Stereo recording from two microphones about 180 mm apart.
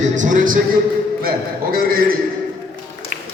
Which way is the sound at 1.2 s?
55° right (ahead or behind).